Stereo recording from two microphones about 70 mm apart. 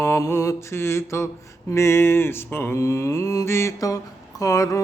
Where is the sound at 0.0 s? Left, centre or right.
Left.